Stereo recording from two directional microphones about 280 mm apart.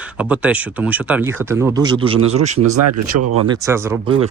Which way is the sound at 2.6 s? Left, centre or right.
Right.